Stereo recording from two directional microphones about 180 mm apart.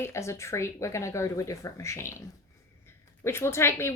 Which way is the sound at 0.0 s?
15° left (ahead or behind).